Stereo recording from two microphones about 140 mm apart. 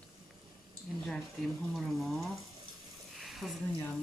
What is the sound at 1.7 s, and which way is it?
Speech, centre (ahead or behind).